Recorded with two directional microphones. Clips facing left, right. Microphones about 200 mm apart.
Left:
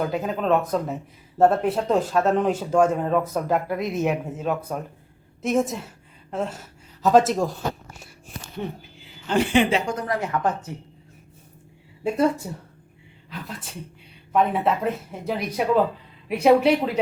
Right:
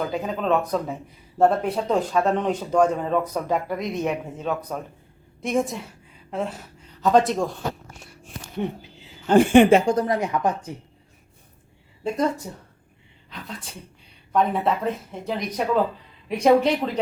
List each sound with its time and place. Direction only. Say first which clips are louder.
0.1 s speech: left 1 dB; centre (ahead or behind)
9.2 s speech: right 6 dB; 50° right (ahead or behind)
9.8 s a woman's voice: right 7 dB; 35° right (ahead or behind)
10.1 s speech: right 1 dB; 15° right (ahead or behind)
12.0 s speech: left 3 dB; 5° left (ahead or behind)
14.3 s speech: left 1 dB; 5° left (ahead or behind)